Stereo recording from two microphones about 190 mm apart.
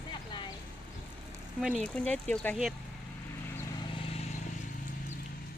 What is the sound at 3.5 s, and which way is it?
Vehicle, 15° left (ahead or behind).